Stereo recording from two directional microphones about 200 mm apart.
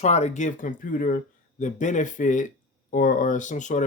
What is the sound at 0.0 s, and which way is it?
Speech, 35° left (ahead or behind).